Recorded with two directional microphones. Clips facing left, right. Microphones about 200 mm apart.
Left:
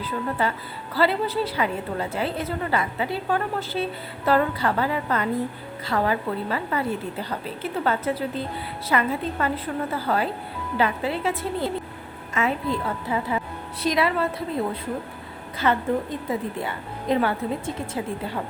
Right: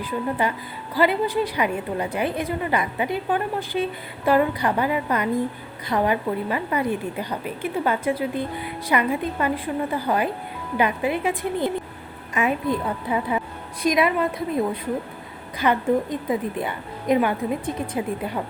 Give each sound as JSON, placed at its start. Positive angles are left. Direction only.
{"t": 0.0, "sound": "a woman's voice", "side_deg": -15}